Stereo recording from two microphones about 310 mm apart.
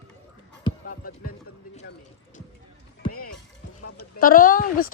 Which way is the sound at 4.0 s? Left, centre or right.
Left.